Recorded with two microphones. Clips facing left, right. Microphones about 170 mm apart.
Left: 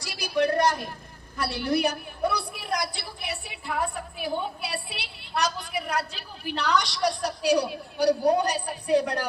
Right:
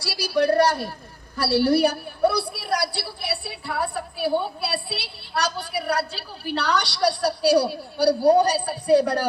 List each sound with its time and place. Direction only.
0.0 s a woman's voice: 35° right (ahead or behind)